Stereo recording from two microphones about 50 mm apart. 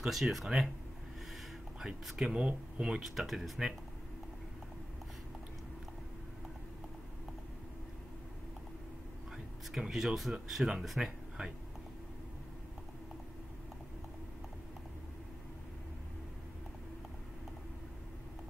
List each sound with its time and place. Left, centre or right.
0.0 s speech: centre
2.1 s speech: centre
3.0 s speech: centre
9.7 s speech: centre